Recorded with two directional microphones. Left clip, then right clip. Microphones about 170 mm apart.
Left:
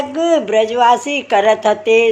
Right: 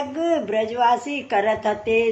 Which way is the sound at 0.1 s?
45° left (ahead or behind).